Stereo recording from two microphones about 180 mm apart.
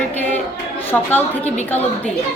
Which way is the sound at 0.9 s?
10° left (ahead or behind).